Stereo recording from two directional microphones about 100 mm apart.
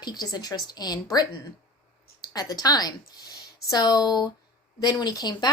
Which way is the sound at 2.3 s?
40° left (ahead or behind).